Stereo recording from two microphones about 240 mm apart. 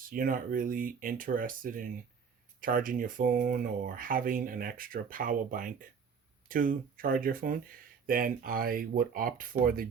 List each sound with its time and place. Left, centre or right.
0.0 s speech: right